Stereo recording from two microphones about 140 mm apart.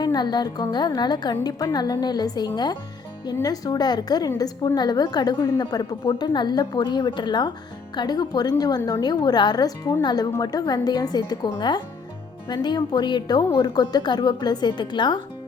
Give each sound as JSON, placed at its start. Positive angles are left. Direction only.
{"t": 0.0, "sound": "a woman's voice", "side_deg": 30}
{"t": 12.6, "sound": "a woman's voice", "side_deg": 30}